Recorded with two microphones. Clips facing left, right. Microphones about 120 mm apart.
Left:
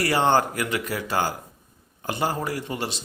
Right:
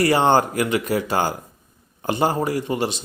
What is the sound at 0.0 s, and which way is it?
Speech, 20° right (ahead or behind).